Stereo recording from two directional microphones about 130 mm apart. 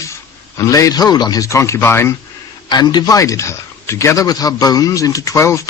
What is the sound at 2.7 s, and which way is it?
Speech, 35° left (ahead or behind).